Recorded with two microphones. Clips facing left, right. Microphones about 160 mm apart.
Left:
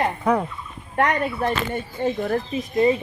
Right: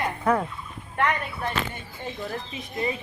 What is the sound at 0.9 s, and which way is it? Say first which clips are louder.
Speech: left 4 dB; 40° left (ahead or behind).